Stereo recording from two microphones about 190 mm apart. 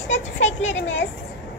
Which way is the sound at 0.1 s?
85° left.